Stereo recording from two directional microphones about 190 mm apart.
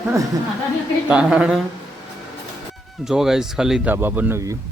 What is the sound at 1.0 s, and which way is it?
Speech, 5° right (ahead or behind).